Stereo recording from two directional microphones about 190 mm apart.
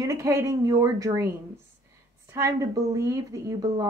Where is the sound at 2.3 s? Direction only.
15° right (ahead or behind).